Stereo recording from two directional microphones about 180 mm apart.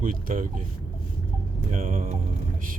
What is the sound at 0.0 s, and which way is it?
Speech, 50° right (ahead or behind).